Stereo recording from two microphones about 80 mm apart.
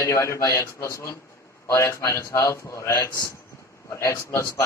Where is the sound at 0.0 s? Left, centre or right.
Left.